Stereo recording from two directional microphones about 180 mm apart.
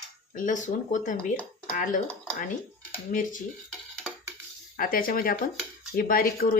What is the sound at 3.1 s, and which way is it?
Speech, 45° left (ahead or behind).